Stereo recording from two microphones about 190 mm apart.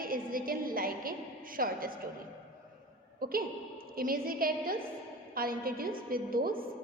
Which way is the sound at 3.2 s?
50° right (ahead or behind).